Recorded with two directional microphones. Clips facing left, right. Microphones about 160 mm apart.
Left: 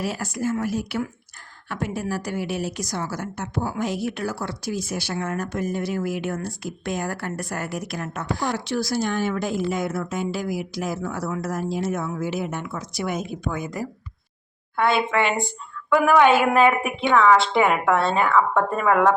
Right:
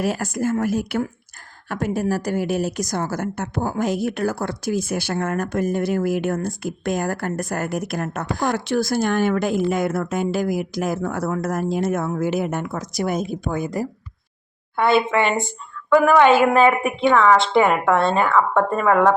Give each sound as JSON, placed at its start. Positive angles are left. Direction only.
{"t": 0.0, "sound": "a woman's voice", "side_deg": -50}
{"t": 14.8, "sound": "a woman's voice", "side_deg": 0}